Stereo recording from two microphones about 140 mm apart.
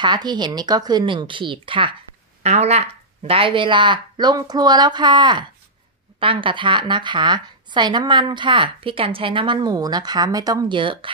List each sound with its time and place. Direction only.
0.0 s speech: 30° right (ahead or behind)
2.4 s speech: 50° right (ahead or behind)
3.3 s speech: 40° right (ahead or behind)